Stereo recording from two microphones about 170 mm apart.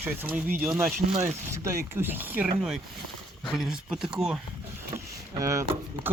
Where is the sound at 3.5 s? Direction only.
5° right (ahead or behind).